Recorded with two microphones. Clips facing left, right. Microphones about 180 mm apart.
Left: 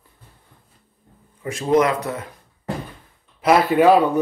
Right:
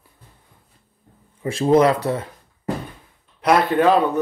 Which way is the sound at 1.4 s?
30° right (ahead or behind).